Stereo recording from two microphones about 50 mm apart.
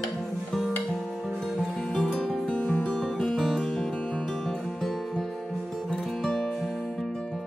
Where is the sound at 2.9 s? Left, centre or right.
Centre.